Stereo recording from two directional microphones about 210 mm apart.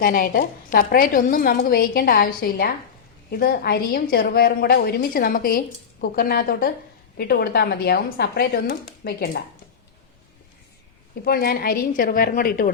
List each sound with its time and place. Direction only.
0.0 s a woman's voice: 45° left (ahead or behind)
11.3 s a woman's voice: 45° left (ahead or behind)